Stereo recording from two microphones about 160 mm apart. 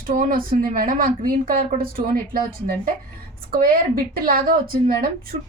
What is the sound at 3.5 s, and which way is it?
A woman's voice, 65° right (ahead or behind).